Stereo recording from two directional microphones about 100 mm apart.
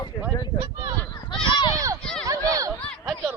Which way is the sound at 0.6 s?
40° right (ahead or behind).